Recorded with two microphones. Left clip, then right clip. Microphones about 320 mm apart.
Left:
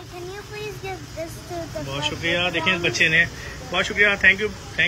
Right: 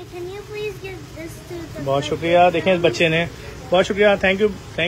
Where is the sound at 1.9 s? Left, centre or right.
Centre.